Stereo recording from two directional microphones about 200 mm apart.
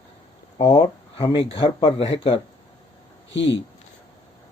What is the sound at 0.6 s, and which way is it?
Speech, 25° left (ahead or behind).